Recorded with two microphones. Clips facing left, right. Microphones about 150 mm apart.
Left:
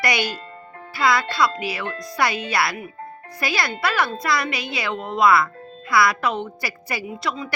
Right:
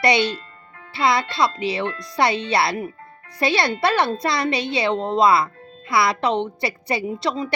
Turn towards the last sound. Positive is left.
turn(degrees=-30)  # may be behind; listen again after turning